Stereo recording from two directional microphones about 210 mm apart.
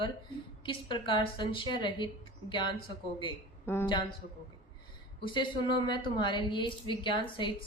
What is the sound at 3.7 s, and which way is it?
Speech, 10° left (ahead or behind).